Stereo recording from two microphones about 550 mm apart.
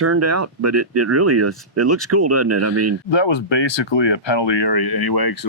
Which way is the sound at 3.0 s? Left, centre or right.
Left.